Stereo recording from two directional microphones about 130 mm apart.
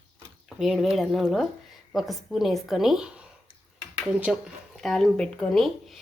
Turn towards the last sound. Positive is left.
turn(degrees=5)  # may be behind; listen again after turning